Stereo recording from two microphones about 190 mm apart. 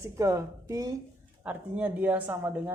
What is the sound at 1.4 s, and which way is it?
Speech, 5° right (ahead or behind).